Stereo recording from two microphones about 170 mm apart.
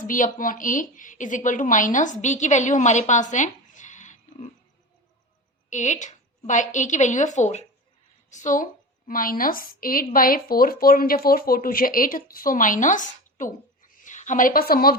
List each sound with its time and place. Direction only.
0.0 s a woman's voice: 50° left (ahead or behind)
5.7 s a woman's voice: 45° left (ahead or behind); by 14.9 s 60° left (ahead or behind)